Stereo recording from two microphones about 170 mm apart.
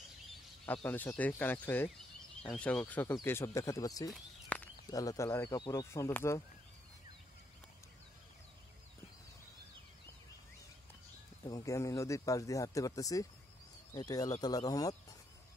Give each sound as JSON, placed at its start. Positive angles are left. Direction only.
{"t": 0.7, "sound": "speech", "side_deg": 10}
{"t": 4.1, "sound": "a sound", "side_deg": 10}
{"t": 4.8, "sound": "speech", "side_deg": 20}
{"t": 11.4, "sound": "speech", "side_deg": 20}